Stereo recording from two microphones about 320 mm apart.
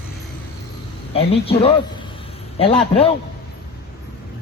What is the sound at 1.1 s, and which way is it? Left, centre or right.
Speech, centre.